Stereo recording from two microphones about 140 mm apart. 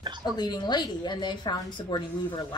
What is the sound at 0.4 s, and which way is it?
A woman's voice, 30° left (ahead or behind).